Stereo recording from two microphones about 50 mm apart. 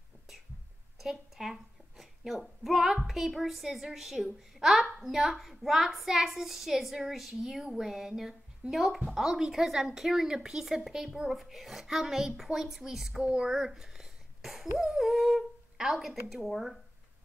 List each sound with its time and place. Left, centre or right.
0.9 s a woman's voice: centre
13.2 s speech: centre
13.5 s a sound: centre
14.8 s humming: centre
16.4 s speech: centre